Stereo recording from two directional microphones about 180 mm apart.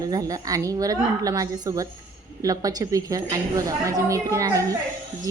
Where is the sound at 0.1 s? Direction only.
20° right (ahead or behind).